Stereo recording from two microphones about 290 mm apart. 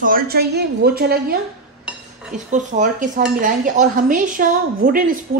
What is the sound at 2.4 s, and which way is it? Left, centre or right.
Speech, right.